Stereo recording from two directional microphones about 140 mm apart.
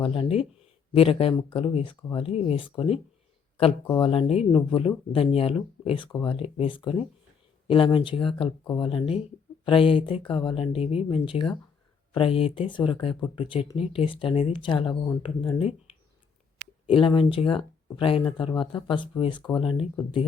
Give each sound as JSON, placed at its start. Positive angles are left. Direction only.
{"t": 0.0, "sound": "speech", "side_deg": 40}
{"t": 4.0, "sound": "speech", "side_deg": 40}
{"t": 16.9, "sound": "speech", "side_deg": 40}